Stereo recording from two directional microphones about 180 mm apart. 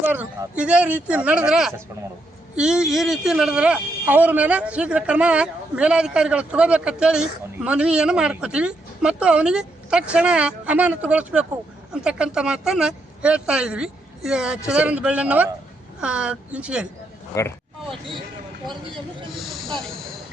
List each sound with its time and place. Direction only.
0.1 s a man's voice: 5° right (ahead or behind)
17.3 s speech: 15° left (ahead or behind)
19.4 s a man's voice: centre (ahead or behind)